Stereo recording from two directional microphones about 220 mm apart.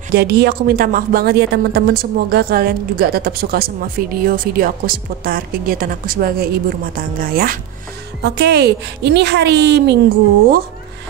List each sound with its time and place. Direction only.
0.1 s a woman's voice: 45° right (ahead or behind)